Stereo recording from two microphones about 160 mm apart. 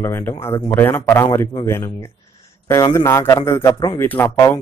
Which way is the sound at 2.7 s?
20° left (ahead or behind).